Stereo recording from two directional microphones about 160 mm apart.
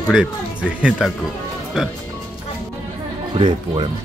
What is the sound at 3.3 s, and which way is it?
Speech, 30° right (ahead or behind).